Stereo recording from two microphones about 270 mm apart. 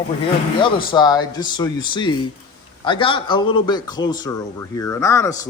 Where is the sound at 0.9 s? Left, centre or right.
Centre.